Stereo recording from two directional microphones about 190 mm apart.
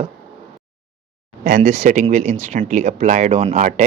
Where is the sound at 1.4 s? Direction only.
45° right (ahead or behind).